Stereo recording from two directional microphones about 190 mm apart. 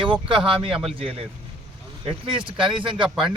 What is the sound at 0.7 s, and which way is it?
Speech, centre (ahead or behind).